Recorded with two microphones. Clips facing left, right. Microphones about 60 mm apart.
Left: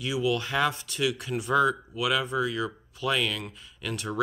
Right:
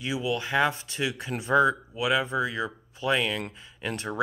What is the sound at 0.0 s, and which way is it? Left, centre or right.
Speech, right.